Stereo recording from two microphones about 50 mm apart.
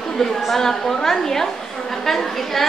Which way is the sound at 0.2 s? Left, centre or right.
Centre.